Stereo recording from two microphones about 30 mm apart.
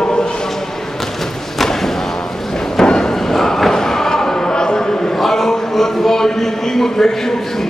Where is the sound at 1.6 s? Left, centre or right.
Centre.